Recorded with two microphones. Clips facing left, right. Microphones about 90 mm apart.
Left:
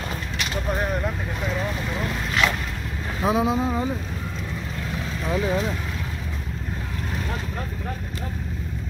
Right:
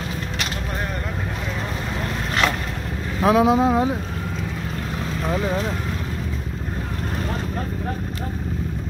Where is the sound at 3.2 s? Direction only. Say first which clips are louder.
Right 6 dB; 75° right (ahead or behind).